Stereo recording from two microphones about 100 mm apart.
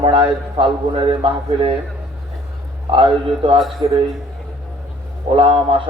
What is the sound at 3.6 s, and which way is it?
Speech, centre (ahead or behind).